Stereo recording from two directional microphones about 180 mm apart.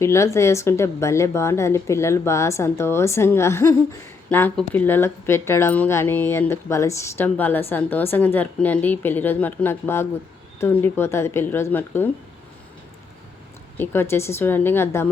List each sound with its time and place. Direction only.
0.0 s speech: 15° left (ahead or behind)
13.7 s speech: 10° left (ahead or behind)